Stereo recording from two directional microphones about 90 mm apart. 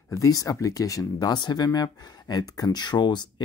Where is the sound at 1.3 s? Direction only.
50° left (ahead or behind).